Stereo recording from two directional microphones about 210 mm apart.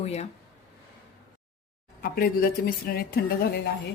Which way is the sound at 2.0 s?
45° left (ahead or behind).